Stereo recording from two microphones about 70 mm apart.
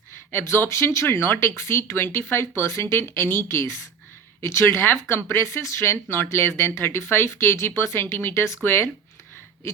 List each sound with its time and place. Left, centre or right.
0.7 s speech: left
1.0 s speech: left